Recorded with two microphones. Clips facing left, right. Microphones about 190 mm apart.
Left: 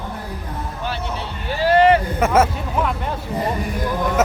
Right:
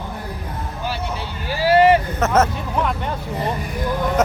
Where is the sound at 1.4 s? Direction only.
5° right (ahead or behind).